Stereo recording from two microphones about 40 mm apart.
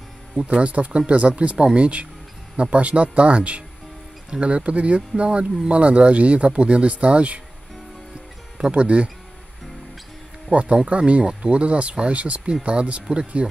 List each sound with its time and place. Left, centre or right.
0.4 s speech: right
8.7 s speech: right
10.5 s speech: right